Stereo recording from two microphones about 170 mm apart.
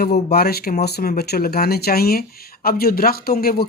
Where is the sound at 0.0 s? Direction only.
65° left (ahead or behind).